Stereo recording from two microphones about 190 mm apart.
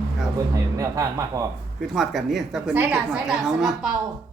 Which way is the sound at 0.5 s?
15° right (ahead or behind).